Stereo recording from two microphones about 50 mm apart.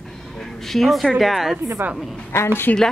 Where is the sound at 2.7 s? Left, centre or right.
Left.